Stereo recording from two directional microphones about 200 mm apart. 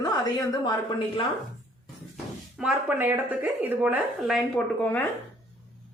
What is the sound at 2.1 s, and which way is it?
Speech, 5° right (ahead or behind).